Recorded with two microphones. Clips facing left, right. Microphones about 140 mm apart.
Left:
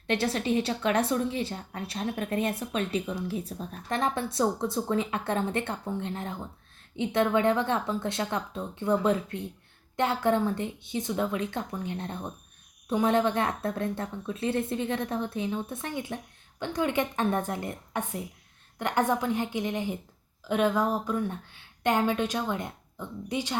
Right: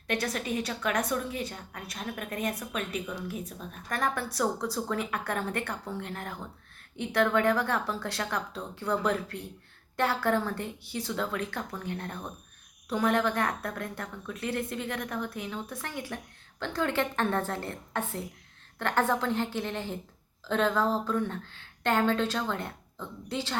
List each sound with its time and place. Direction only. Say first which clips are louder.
0.1 s a woman's voice: left 4 dB; 30° left (ahead or behind)
3.9 s a woman's voice: left 3 dB; 25° left (ahead or behind)